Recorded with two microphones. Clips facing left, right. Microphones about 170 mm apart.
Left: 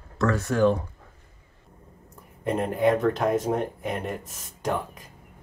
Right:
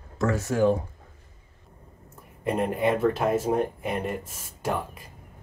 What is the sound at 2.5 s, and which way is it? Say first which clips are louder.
Speech: left 2 dB; 5° right (ahead or behind).